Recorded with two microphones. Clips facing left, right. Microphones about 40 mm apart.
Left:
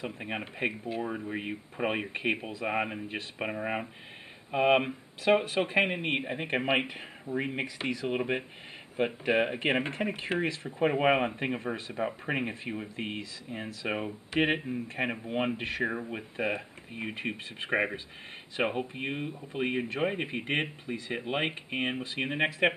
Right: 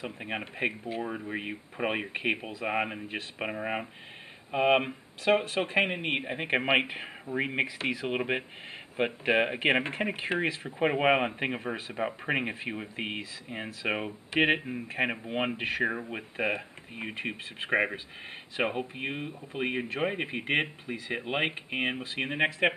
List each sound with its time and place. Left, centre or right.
0.0 s speech: centre
6.3 s speech: centre